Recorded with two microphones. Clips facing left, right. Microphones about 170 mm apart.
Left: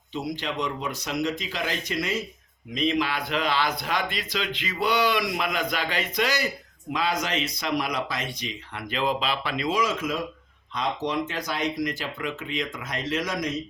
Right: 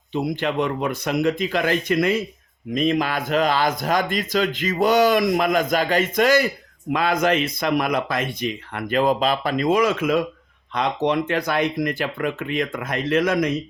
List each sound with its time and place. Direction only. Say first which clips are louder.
0.1 s a man's voice: right 7 dB; 55° right (ahead or behind)